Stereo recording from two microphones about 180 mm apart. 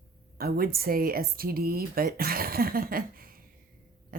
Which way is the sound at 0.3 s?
55° right (ahead or behind).